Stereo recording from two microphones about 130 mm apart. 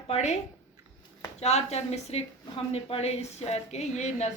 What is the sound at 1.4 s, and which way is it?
A woman's voice, 55° left (ahead or behind).